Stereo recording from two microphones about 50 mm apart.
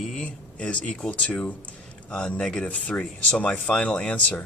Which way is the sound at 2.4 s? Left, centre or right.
Centre.